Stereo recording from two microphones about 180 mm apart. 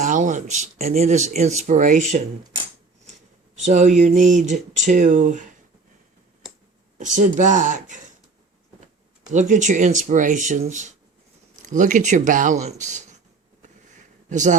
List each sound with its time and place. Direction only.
0.0 s speech: 45° right (ahead or behind)
3.6 s speech: 40° right (ahead or behind)
7.0 s speech: 45° right (ahead or behind)
9.3 s speech: 45° right (ahead or behind)
14.3 s a man's voice: 40° right (ahead or behind)